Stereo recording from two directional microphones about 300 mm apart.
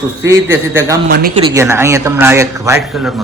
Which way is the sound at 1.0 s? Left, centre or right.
Right.